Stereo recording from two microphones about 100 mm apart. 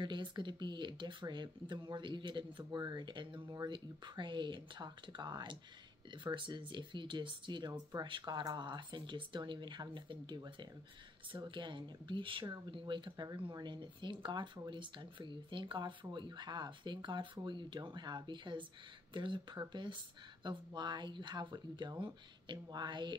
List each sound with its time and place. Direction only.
0.0 s speech: 50° right (ahead or behind)